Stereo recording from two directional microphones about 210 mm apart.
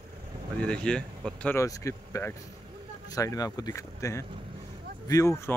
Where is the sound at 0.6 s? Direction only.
5° left (ahead or behind).